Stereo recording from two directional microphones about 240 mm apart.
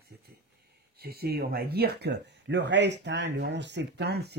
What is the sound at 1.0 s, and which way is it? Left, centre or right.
Speech, right.